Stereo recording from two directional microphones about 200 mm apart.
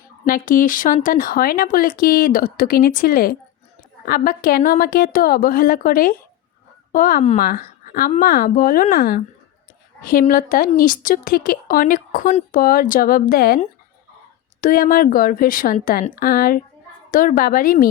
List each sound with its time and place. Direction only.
0.3 s a woman's voice: 45° left (ahead or behind)
14.6 s speech: 45° left (ahead or behind)